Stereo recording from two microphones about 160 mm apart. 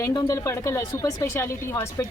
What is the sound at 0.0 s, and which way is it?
A woman's voice, 20° left (ahead or behind).